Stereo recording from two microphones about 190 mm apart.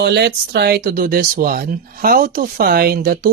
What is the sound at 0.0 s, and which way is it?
Speech, 60° right (ahead or behind).